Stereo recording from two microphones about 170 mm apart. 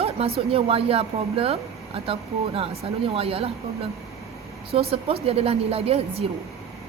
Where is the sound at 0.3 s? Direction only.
35° right (ahead or behind).